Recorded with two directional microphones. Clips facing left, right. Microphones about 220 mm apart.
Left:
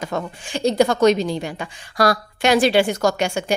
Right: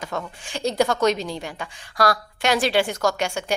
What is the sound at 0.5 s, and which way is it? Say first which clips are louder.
A woman's voice: left 4 dB; 5° right (ahead or behind).